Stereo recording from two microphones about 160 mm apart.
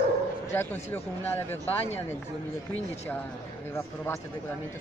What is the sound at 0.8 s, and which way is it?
Speech, 15° left (ahead or behind).